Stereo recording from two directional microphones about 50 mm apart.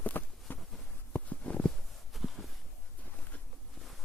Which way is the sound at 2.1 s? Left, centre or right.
Centre.